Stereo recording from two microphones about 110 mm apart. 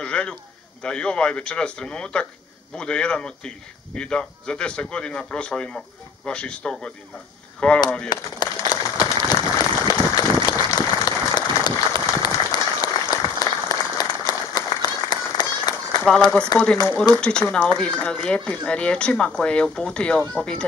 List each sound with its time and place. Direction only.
0.0 s a man's voice: 10° left (ahead or behind)
8.1 s applause: 40° left (ahead or behind)
16.5 s speech: 40° left (ahead or behind)
17.2 s speech: 10° left (ahead or behind)